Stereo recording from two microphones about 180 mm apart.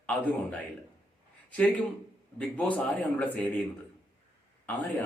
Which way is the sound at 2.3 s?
10° left (ahead or behind).